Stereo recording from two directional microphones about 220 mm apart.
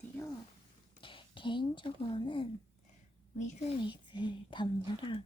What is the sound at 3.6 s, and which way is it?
Speech, 20° left (ahead or behind).